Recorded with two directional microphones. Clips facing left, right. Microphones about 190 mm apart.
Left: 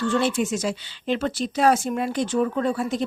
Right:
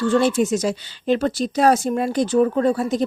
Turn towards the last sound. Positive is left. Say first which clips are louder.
# right 5 dB
turn(degrees=-40)  # may be behind; listen again after turning